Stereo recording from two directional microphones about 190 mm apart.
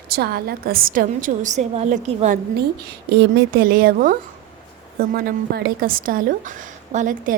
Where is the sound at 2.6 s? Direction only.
55° right (ahead or behind).